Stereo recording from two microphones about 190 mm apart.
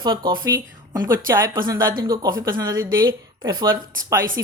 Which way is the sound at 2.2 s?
20° right (ahead or behind).